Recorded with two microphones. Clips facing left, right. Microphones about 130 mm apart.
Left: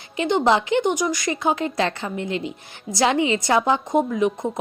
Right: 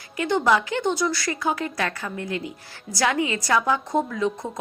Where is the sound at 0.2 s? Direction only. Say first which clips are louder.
Left 2 dB; 20° left (ahead or behind).